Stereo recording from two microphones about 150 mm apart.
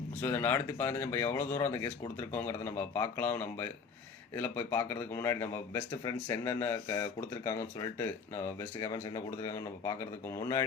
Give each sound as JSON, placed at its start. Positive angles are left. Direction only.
{"t": 0.2, "sound": "speech", "side_deg": 15}